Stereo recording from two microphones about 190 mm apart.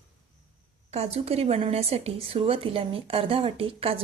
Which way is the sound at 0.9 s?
30° right (ahead or behind).